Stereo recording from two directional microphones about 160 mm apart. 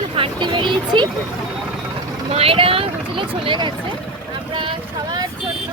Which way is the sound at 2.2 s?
40° right (ahead or behind).